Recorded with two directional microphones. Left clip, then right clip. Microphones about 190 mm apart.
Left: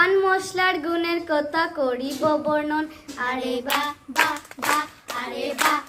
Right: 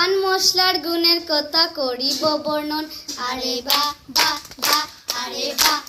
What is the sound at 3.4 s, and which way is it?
Child singing, 55° left (ahead or behind).